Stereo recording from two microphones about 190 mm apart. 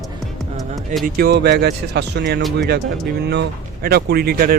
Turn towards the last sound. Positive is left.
turn(degrees=-50)  # may be behind; listen again after turning